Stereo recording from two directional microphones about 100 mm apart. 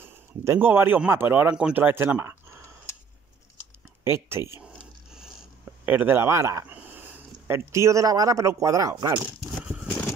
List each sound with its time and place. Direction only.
0.0 s a man's voice: 25° right (ahead or behind)
4.0 s speech: 25° right (ahead or behind)
5.1 s a sound: 5° right (ahead or behind)
5.9 s speech: 20° right (ahead or behind)
6.7 s speech: 20° right (ahead or behind); by 9.2 s 40° right (ahead or behind)